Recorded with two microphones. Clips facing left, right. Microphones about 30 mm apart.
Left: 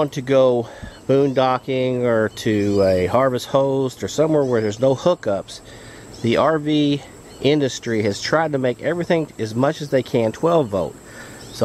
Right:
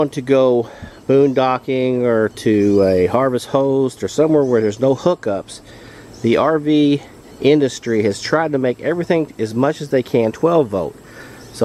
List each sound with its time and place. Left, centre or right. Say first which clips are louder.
0.1 s speech: right 2 dB; centre
4.4 s speech: right 4 dB; left
4.6 s speech: right 2 dB; centre